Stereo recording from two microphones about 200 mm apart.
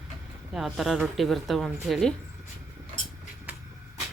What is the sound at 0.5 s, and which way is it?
Speech, centre (ahead or behind).